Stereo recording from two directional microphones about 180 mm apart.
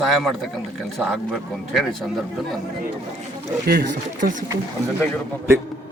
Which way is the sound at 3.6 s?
65° right (ahead or behind).